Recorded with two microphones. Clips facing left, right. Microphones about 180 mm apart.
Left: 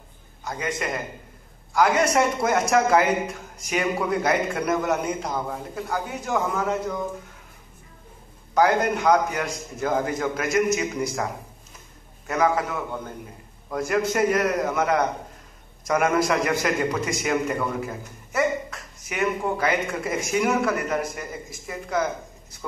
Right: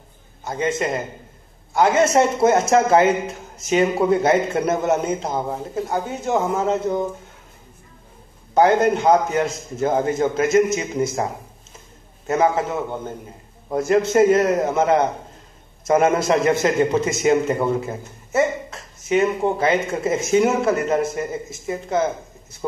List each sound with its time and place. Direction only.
0.4 s a man's voice: 25° right (ahead or behind)
8.5 s a man's voice: 25° right (ahead or behind)